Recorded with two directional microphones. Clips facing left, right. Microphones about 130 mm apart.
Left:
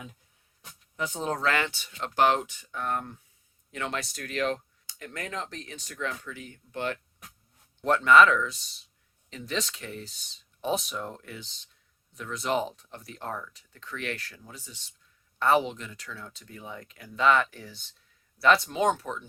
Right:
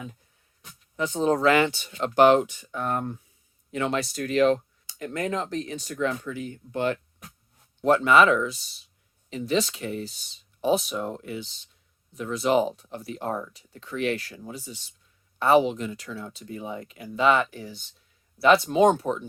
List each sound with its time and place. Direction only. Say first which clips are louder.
0.9 s speech: right 7 dB; 5° left (ahead or behind)
1.3 s speech: right 8 dB; 10° right (ahead or behind)
2.8 s speech: right 3 dB; 35° right (ahead or behind)
3.9 s speech: right 7 dB; 5° right (ahead or behind)
4.9 s speech: right 9 dB; 30° right (ahead or behind)
7.8 s speech: right 1 dB; 10° right (ahead or behind)
18.7 s speech: right 7 dB; 20° right (ahead or behind)